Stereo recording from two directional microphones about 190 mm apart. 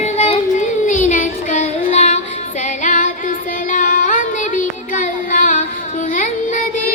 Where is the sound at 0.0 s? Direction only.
35° left (ahead or behind).